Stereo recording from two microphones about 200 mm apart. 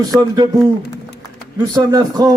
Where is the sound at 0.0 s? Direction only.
20° right (ahead or behind).